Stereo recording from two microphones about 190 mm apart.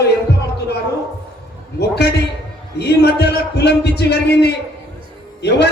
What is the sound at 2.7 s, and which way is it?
A man's voice, 60° left (ahead or behind).